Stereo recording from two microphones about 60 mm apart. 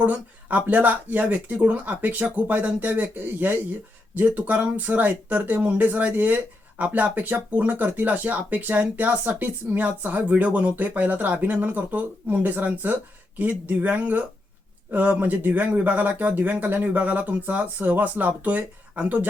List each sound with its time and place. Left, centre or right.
0.0 s speech: right